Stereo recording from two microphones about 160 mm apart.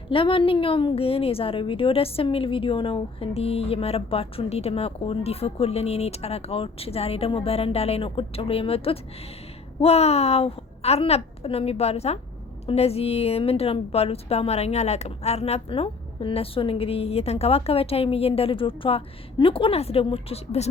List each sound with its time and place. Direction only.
0.1 s a woman's voice: 35° left (ahead or behind)